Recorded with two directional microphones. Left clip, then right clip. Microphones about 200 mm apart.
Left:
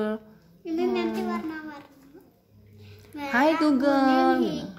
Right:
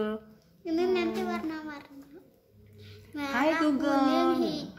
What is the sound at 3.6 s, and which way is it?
Speech, 35° left (ahead or behind).